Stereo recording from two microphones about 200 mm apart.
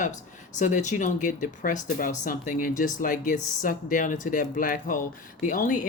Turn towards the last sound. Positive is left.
turn(degrees=40)  # may be behind; listen again after turning